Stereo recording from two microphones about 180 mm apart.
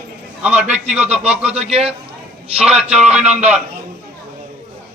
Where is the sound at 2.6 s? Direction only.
5° right (ahead or behind).